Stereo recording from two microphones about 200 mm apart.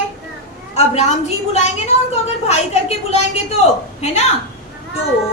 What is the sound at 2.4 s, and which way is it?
A woman's voice, 30° left (ahead or behind).